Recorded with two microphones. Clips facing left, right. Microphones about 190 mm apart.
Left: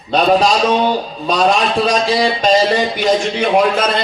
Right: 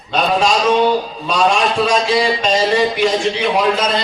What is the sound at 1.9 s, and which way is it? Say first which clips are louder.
A man's voice: even; 35° left (ahead or behind).